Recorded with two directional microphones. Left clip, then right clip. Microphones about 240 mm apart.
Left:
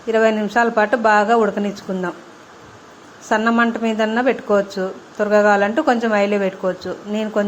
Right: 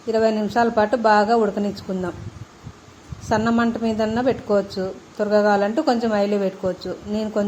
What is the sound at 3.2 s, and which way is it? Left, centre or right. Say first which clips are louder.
A woman's voice: left 4 dB; centre.